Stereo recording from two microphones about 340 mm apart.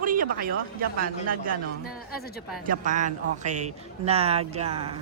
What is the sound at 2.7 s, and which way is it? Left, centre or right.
A woman's voice, right.